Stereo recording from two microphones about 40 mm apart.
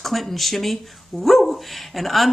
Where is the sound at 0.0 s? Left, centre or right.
Centre.